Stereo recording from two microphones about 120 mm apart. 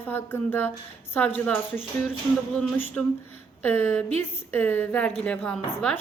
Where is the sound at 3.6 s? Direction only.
15° left (ahead or behind).